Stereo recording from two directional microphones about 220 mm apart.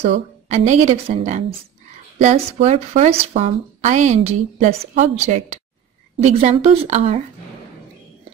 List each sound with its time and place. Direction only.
0.0 s speech: 30° right (ahead or behind)